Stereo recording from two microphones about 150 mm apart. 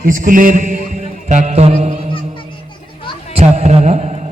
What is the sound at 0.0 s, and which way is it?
A man's voice, 60° right (ahead or behind).